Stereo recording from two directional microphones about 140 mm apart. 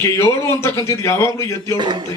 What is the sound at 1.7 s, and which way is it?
Speech, 35° right (ahead or behind).